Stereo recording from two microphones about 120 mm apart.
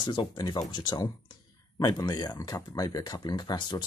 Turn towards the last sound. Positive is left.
turn(degrees=35)  # may be behind; listen again after turning